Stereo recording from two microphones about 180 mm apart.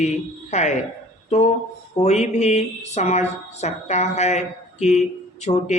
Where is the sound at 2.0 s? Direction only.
40° left (ahead or behind).